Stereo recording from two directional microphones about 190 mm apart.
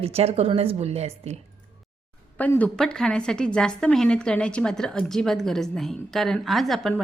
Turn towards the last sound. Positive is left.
turn(degrees=0)  # may be behind; listen again after turning